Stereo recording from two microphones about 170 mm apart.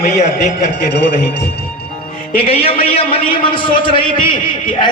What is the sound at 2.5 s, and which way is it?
A man's voice, 35° left (ahead or behind).